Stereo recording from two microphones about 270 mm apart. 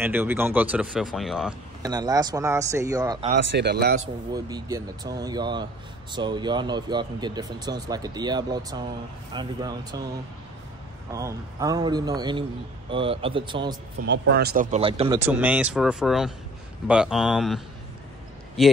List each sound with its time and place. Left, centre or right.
0.0 s speech: centre
1.8 s speech: centre
3.3 s speech: right
4.0 s speech: centre
11.1 s speech: centre
14.0 s speech: right; by 17.6 s centre